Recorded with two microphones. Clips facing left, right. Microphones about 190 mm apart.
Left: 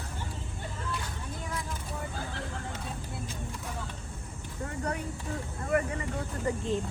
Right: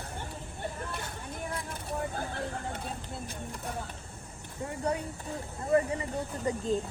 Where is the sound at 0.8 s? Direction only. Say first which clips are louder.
Left 1 dB; 55° right (ahead or behind).